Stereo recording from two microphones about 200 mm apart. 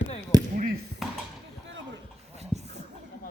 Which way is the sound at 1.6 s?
65° right (ahead or behind).